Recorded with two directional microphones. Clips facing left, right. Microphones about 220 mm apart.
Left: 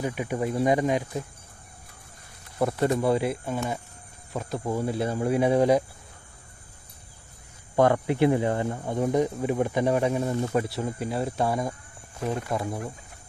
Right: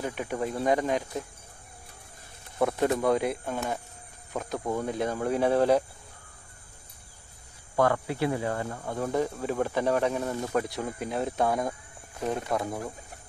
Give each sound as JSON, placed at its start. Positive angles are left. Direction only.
{"t": 0.0, "sound": "speech", "side_deg": 10}
{"t": 2.8, "sound": "speech", "side_deg": 0}
{"t": 7.7, "sound": "speech", "side_deg": 20}